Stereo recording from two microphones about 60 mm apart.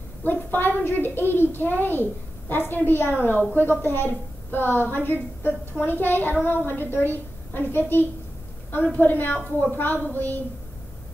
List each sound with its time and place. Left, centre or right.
0.2 s a woman's voice: left